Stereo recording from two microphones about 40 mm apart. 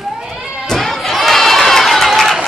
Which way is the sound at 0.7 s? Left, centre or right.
Centre.